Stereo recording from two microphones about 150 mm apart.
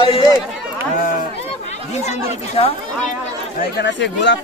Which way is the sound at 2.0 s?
45° left (ahead or behind).